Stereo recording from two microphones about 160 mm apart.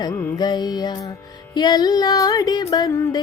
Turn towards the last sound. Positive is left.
turn(degrees=20)  # may be behind; listen again after turning